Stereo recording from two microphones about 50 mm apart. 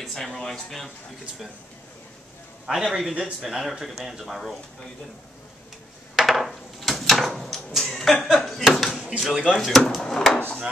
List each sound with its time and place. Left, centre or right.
0.0 s speech: centre
2.6 s a man's voice: centre
6.1 s a sound: centre
9.2 s a man's voice: centre
10.0 s drawer open or close: centre
10.3 s drawer open or close: left